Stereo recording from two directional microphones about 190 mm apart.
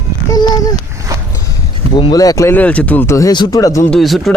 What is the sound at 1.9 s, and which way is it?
Speech, 25° left (ahead or behind).